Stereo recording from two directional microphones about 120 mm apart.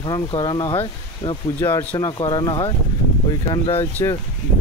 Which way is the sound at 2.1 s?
40° left (ahead or behind).